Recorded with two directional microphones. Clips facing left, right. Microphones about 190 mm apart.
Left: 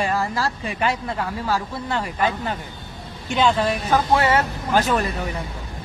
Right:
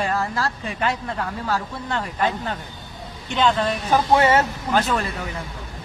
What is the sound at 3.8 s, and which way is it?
Speech, 20° right (ahead or behind).